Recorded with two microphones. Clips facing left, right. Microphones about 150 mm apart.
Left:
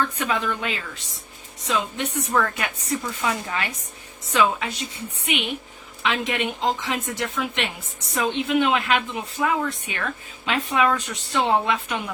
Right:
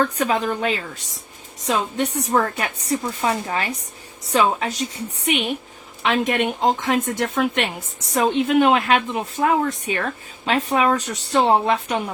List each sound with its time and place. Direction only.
0.0 s a woman's voice: 40° right (ahead or behind)